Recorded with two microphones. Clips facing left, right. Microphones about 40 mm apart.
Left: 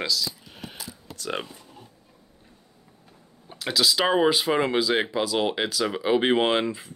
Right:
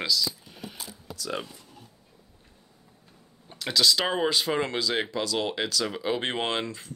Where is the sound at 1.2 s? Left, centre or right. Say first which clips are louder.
Left 2 dB; left.